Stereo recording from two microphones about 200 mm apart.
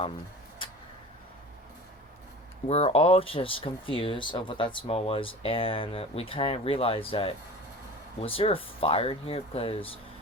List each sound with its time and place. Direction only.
2.6 s speech: 30° left (ahead or behind)